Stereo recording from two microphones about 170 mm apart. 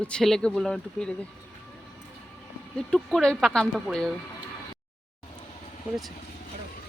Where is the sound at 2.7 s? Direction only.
Centre (ahead or behind).